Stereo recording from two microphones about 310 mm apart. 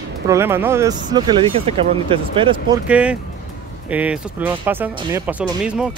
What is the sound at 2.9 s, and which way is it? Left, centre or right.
Speech, centre.